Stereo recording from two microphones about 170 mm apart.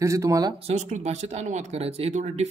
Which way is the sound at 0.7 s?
40° right (ahead or behind).